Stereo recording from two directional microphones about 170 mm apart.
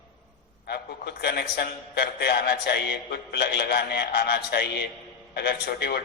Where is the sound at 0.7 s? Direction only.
75° left (ahead or behind).